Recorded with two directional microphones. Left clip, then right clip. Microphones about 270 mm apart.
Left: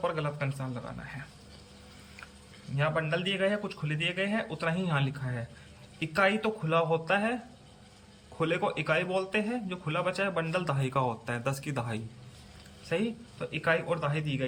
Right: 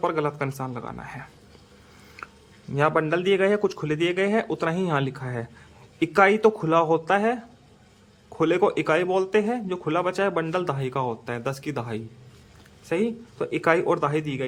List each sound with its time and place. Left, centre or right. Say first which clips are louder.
0.0 s speech: right 7 dB; centre
2.2 s a sound: right 9 dB; centre
2.7 s speech: right 8 dB; centre
8.4 s speech: right 8 dB; centre